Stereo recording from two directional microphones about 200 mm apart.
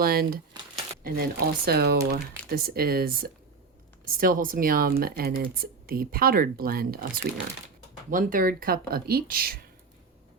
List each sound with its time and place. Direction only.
0.0 s speech: 50° right (ahead or behind)